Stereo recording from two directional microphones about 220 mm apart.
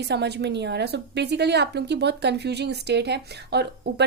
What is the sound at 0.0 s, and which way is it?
A woman's voice, 50° right (ahead or behind).